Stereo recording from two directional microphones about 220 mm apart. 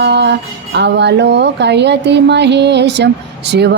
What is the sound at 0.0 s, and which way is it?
Music, 50° right (ahead or behind).